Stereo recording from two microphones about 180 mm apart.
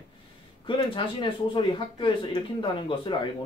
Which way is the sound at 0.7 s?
25° left (ahead or behind).